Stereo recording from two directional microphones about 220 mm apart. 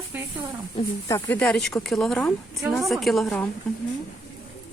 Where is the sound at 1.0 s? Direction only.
10° left (ahead or behind).